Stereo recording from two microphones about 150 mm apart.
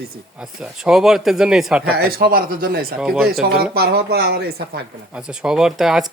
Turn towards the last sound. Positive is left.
turn(degrees=-5)  # may be behind; listen again after turning